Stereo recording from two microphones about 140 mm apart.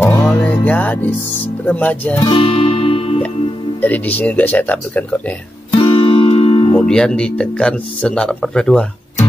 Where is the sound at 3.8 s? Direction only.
10° left (ahead or behind).